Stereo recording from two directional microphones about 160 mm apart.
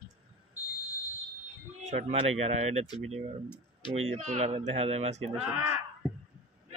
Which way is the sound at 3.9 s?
45° right (ahead or behind).